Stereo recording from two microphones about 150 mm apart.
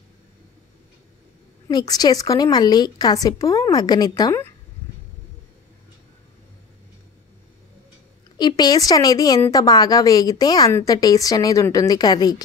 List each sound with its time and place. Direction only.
1.7 s a woman's voice: 25° left (ahead or behind)
8.4 s a woman's voice: 30° left (ahead or behind)